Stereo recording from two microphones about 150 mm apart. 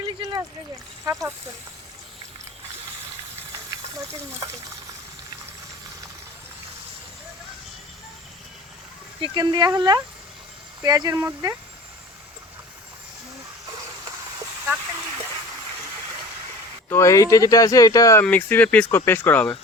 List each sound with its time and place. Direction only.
0.2 s a sound: 25° right (ahead or behind)
1.0 s speech: 20° right (ahead or behind)
9.2 s speech: 30° right (ahead or behind)
16.9 s speech: 20° left (ahead or behind)
18.2 s speech: 10° left (ahead or behind)